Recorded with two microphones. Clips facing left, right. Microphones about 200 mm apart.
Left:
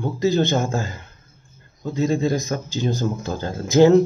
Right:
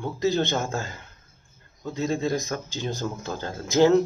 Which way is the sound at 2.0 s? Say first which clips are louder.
Left 5 dB; 10° left (ahead or behind).